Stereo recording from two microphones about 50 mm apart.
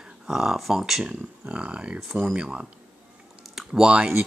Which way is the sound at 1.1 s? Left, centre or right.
Right.